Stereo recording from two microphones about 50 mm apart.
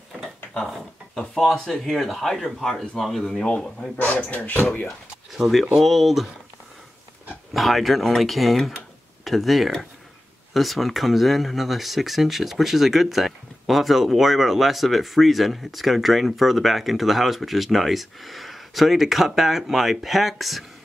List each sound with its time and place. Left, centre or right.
0.2 s speech: centre
3.4 s speech: centre
4.3 s speech: left
4.8 s speech: centre
7.5 s speech: centre